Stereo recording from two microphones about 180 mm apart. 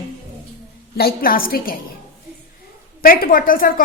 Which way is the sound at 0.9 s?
60° left (ahead or behind).